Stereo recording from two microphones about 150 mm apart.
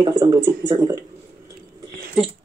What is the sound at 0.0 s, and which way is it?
Speech, 25° right (ahead or behind).